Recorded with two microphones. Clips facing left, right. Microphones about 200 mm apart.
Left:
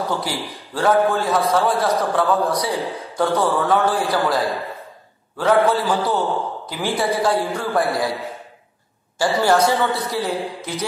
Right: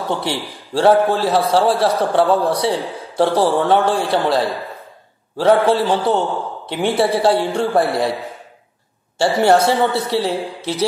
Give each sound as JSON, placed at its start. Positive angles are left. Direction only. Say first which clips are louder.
{"t": 0.1, "sound": "a man's voice", "louder": "right 3 dB", "side_deg": -25}
{"t": 9.2, "sound": "a man's voice", "louder": "right 3 dB", "side_deg": -30}